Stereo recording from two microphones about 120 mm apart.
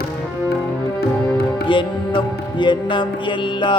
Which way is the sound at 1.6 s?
45° left (ahead or behind).